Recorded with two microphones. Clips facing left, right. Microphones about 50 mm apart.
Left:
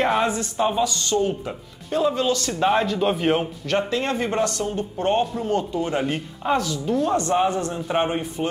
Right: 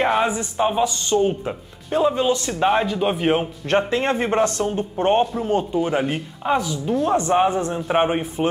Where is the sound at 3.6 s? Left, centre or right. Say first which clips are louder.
Right 3 dB; right.